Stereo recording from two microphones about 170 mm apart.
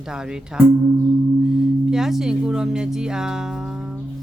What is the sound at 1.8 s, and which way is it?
Speech, 5° right (ahead or behind).